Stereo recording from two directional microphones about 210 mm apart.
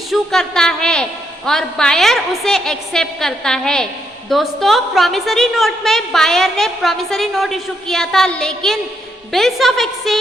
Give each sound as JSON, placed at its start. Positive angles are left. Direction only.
{"t": 0.1, "sound": "a woman's voice", "side_deg": 0}